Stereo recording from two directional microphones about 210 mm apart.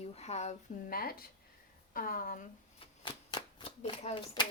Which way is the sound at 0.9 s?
45° left (ahead or behind).